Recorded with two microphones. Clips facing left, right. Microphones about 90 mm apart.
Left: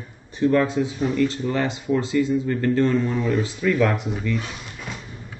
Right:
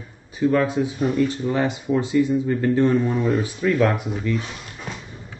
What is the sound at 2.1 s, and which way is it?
Speech, 5° right (ahead or behind).